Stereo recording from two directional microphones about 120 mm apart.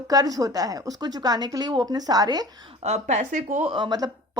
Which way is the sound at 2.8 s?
70° right (ahead or behind).